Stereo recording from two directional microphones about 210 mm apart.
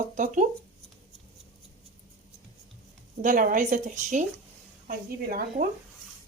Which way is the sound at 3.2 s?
40° right (ahead or behind).